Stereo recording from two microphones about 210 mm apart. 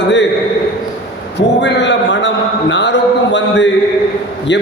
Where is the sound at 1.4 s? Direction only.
55° left (ahead or behind).